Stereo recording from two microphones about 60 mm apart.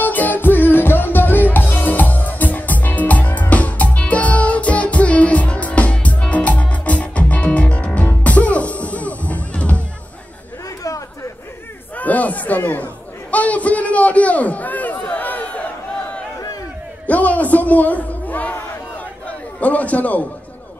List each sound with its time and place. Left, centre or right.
0.0 s music: left
12.0 s chatter: left
17.0 s a sound: left